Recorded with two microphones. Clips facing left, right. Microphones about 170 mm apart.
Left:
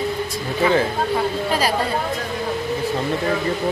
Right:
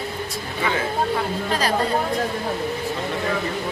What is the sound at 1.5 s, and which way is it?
Speech, 10° left (ahead or behind).